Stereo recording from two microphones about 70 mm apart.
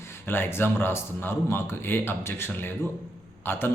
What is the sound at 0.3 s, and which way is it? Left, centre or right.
Speech, left.